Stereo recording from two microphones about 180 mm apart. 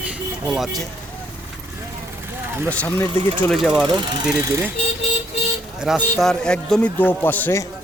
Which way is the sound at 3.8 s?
25° right (ahead or behind).